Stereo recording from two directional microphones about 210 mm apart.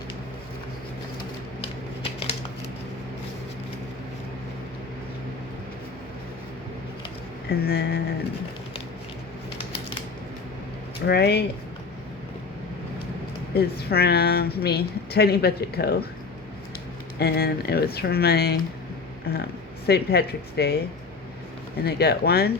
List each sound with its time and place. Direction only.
7.6 s a woman's voice: 50° left (ahead or behind)
11.0 s a woman's voice: 50° left (ahead or behind)
13.5 s a woman's voice: 50° left (ahead or behind)
17.2 s a woman's voice: 50° left (ahead or behind)
21.8 s a woman's voice: 50° left (ahead or behind)